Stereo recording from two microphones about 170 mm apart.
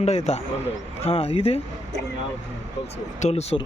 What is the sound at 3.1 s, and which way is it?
Speech, 40° left (ahead or behind).